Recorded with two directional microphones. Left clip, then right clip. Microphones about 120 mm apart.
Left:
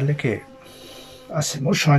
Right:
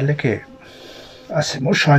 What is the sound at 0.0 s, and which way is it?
A man's voice, 25° left (ahead or behind).